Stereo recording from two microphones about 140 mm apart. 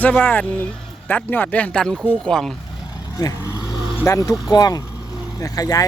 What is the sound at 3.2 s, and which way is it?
Speech, 30° left (ahead or behind).